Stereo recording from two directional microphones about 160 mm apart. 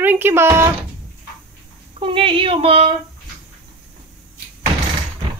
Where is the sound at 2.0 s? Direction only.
35° right (ahead or behind).